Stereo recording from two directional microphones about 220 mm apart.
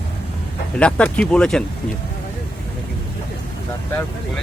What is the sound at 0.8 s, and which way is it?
Speech, 5° left (ahead or behind).